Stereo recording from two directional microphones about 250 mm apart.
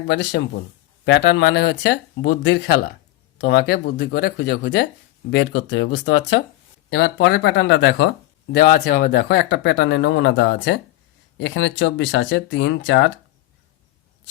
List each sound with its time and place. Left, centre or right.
0.1 s speech: left